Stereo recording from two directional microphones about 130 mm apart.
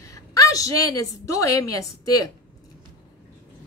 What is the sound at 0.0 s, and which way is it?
A woman's voice, 25° left (ahead or behind).